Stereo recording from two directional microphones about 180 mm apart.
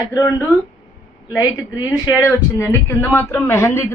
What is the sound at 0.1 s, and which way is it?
A woman's voice, 15° left (ahead or behind).